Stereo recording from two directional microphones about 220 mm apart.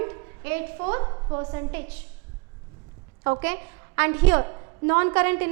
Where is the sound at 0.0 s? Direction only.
15° right (ahead or behind).